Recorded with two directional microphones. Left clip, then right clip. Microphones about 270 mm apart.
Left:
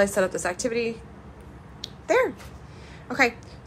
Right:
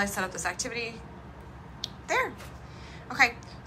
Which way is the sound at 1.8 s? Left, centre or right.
Centre.